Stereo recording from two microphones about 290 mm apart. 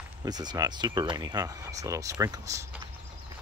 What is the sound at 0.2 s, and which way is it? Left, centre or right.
Speech, centre.